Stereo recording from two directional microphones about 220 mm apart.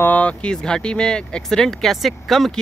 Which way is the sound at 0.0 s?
5° left (ahead or behind).